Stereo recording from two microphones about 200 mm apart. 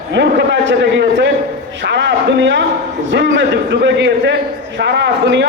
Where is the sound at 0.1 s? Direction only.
60° right (ahead or behind).